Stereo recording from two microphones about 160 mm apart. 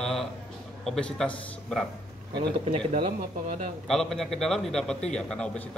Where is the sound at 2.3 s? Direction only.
40° right (ahead or behind).